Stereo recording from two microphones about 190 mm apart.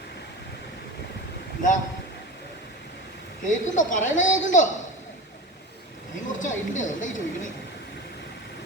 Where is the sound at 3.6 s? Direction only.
40° left (ahead or behind).